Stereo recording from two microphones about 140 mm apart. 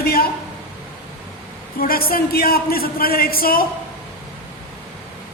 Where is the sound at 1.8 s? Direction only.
90° left.